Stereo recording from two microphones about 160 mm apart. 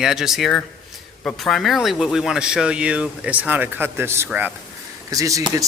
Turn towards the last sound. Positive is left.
turn(degrees=-20)  # may be behind; listen again after turning